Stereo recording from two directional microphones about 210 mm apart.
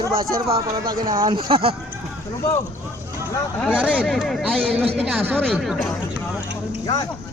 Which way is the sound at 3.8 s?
5° left (ahead or behind).